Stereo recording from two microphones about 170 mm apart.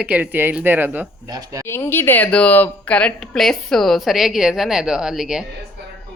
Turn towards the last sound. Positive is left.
turn(degrees=-5)  # may be behind; listen again after turning